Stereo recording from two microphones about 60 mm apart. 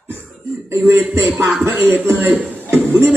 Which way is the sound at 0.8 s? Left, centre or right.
Right.